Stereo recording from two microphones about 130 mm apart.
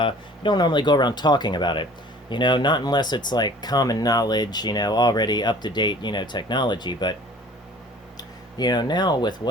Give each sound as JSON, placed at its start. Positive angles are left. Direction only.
{"t": 0.0, "sound": "speech", "side_deg": 35}
{"t": 8.5, "sound": "speech", "side_deg": 35}